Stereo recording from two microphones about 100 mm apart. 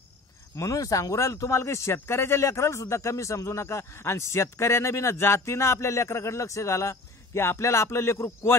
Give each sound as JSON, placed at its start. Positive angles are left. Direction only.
{"t": 0.6, "sound": "speech", "side_deg": 35}